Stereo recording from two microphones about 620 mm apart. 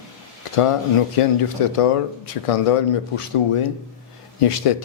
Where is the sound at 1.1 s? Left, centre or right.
Left.